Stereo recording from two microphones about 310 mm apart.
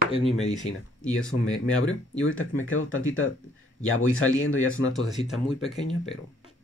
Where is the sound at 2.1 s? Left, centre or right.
Left.